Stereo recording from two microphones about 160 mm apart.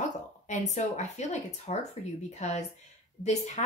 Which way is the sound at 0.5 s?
45° left (ahead or behind).